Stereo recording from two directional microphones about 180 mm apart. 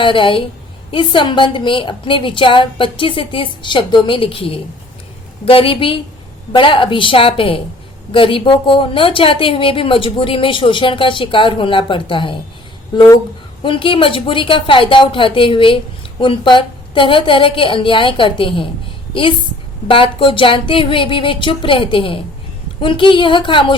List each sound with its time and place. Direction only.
0.0 s speech: 30° left (ahead or behind)
13.6 s speech: 30° left (ahead or behind)
19.9 s speech: 30° left (ahead or behind)